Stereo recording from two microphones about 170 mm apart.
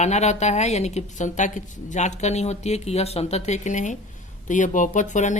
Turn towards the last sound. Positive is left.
turn(degrees=45)  # may be behind; listen again after turning